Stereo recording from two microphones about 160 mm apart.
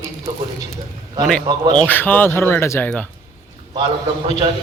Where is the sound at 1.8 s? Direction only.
10° left (ahead or behind).